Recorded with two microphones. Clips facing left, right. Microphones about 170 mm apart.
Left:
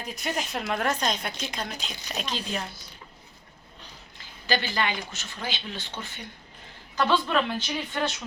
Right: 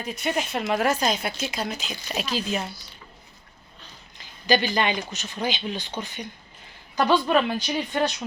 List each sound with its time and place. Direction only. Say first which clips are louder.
0.0 s a woman's voice: right 4 dB; centre (ahead or behind)
4.2 s speech: right 6 dB; 15° right (ahead or behind)